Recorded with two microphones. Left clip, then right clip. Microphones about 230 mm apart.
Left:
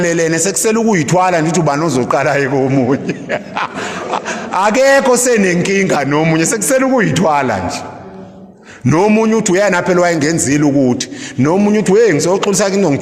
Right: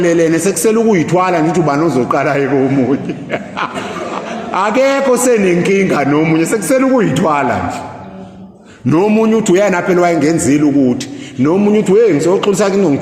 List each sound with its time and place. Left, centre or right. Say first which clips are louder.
0.0 s a man's voice: right 2 dB; left
9.0 s a man's voice: even; left